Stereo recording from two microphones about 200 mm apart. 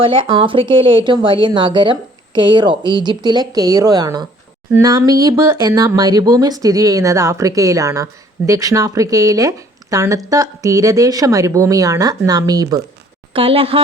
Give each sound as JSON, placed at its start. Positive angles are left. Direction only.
{"t": 0.0, "sound": "speech", "side_deg": -25}